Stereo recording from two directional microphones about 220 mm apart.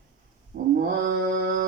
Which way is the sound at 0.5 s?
40° right (ahead or behind).